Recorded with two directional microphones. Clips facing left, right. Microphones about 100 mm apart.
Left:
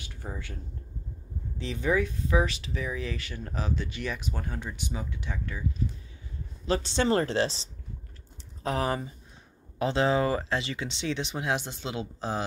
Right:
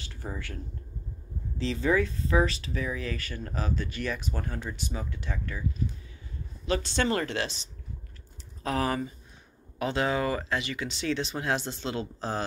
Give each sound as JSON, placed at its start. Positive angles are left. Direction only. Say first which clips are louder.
{"t": 0.0, "sound": "speech", "louder": "right 1 dB", "side_deg": 15}
{"t": 1.6, "sound": "speech", "louder": "right 1 dB", "side_deg": 15}
{"t": 6.6, "sound": "speech", "louder": "left 1 dB", "side_deg": 25}